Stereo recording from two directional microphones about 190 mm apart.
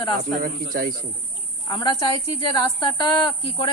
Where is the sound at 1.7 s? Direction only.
25° left (ahead or behind).